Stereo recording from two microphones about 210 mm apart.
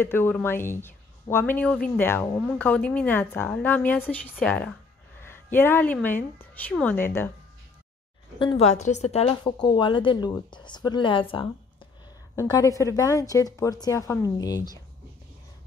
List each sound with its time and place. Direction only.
0.0 s a woman's voice: 10° left (ahead or behind)
8.4 s a woman's voice: 30° left (ahead or behind)